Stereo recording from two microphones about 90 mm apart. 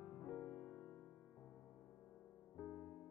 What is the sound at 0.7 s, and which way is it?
Music, 20° left (ahead or behind).